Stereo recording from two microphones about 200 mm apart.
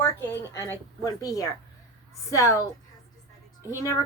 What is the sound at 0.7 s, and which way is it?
Speech, 15° left (ahead or behind).